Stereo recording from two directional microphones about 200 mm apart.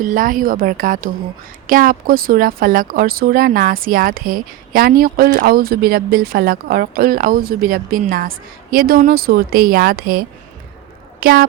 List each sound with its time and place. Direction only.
0.0 s speech: 45° right (ahead or behind)